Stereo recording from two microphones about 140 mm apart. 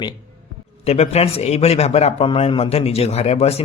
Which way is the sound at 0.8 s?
50° left (ahead or behind).